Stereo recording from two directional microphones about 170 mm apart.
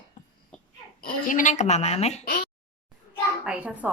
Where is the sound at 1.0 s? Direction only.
50° left (ahead or behind).